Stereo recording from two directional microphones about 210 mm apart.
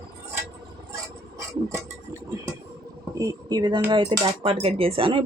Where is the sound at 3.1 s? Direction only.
15° right (ahead or behind).